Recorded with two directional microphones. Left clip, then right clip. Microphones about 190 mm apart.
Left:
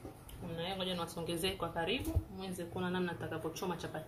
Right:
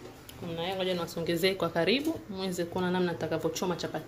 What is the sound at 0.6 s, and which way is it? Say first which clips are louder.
Speech: right 7 dB; 20° right (ahead or behind).